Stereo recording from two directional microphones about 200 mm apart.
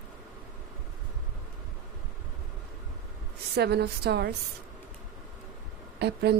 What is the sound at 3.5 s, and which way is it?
Speech, 55° right (ahead or behind).